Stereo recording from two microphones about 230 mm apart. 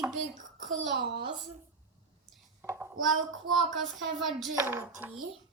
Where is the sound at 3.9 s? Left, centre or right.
Centre.